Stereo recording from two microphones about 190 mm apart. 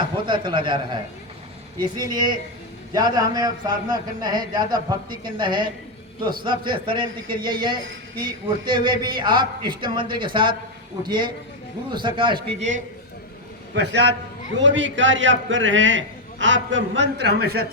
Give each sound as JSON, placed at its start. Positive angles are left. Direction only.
{"t": 0.0, "sound": "a man's voice", "side_deg": -25}
{"t": 13.7, "sound": "a man's voice", "side_deg": -65}
{"t": 14.6, "sound": "a man's voice", "side_deg": -75}